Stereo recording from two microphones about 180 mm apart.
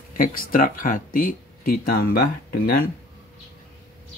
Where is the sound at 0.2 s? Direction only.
50° left (ahead or behind).